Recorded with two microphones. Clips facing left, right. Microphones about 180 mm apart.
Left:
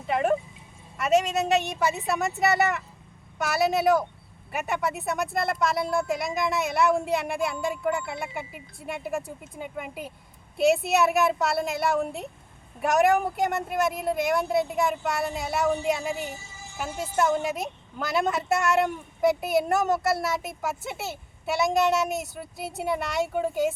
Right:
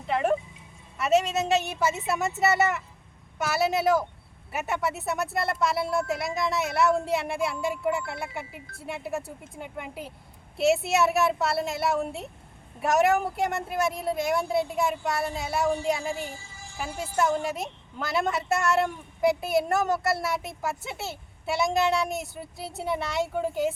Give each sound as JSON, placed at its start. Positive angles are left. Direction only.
{"t": 0.1, "sound": "a sound", "side_deg": 0}
{"t": 0.9, "sound": "a woman's voice", "side_deg": 0}
{"t": 16.2, "sound": "speech", "side_deg": 20}
{"t": 16.7, "sound": "a woman's voice", "side_deg": 0}